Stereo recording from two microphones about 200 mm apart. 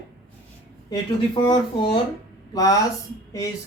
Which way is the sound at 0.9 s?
20° left (ahead or behind).